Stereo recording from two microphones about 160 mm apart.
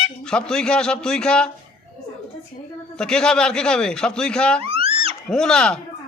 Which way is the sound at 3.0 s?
5° left (ahead or behind).